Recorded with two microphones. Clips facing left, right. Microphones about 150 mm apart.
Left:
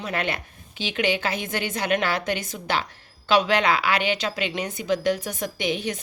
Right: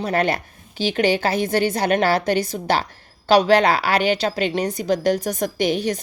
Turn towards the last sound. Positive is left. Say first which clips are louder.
# right 6 dB
turn(degrees=-40)  # may be behind; listen again after turning